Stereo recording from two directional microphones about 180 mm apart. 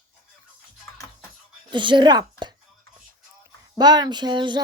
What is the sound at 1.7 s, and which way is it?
Speech, 25° right (ahead or behind).